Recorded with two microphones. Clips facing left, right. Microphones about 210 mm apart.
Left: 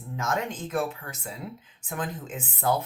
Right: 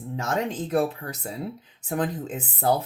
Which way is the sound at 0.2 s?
35° right (ahead or behind).